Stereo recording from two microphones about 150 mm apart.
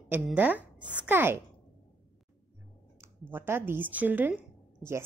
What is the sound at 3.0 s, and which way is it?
A woman's voice, 15° right (ahead or behind).